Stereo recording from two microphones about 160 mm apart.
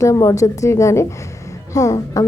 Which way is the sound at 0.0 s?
20° left (ahead or behind).